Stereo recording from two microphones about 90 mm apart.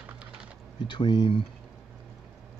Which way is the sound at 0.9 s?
60° left (ahead or behind).